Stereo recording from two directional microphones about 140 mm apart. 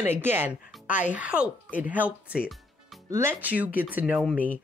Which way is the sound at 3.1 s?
15° right (ahead or behind).